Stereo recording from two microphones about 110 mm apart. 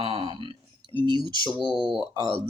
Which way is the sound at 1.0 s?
45° right (ahead or behind).